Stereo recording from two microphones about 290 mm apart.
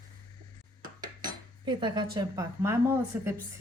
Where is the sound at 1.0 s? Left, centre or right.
Centre.